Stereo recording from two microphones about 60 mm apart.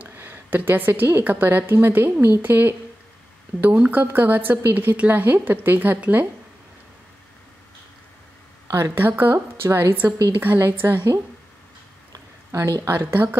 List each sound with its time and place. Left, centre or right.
0.0 s a woman's voice: right
3.7 s a woman's voice: right
8.7 s a woman's voice: right
9.0 s a woman's voice: right
10.3 s a woman's voice: right
12.5 s a woman's voice: right
13.0 s a woman's voice: right